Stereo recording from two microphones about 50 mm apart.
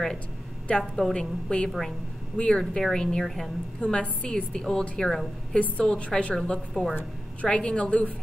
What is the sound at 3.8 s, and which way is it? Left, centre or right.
A woman's voice, left.